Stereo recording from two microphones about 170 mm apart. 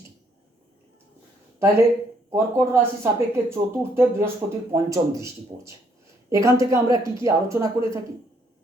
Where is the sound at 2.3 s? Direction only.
15° right (ahead or behind).